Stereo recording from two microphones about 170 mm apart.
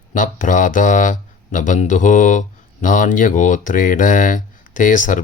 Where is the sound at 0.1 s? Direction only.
50° left (ahead or behind).